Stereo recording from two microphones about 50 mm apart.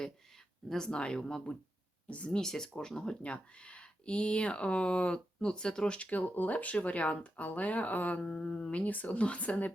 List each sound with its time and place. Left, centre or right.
0.9 s speech: centre
2.4 s speech: centre
6.1 s speech: left
8.2 s speech: centre